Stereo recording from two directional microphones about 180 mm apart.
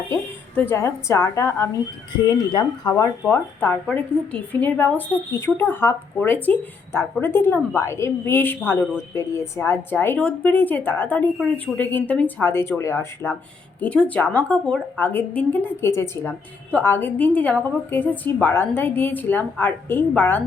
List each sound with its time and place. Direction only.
0.1 s a woman's voice: 15° left (ahead or behind)
3.3 s a woman's voice: 10° left (ahead or behind)